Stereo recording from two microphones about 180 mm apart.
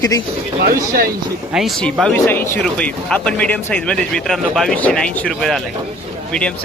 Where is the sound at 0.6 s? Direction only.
55° right (ahead or behind).